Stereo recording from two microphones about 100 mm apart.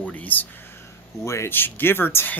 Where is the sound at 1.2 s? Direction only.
30° left (ahead or behind).